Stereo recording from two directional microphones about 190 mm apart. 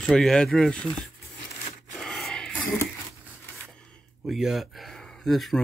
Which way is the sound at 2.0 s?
Centre (ahead or behind).